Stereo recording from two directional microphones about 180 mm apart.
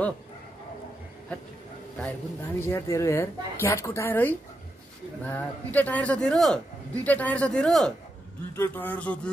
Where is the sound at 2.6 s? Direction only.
15° left (ahead or behind).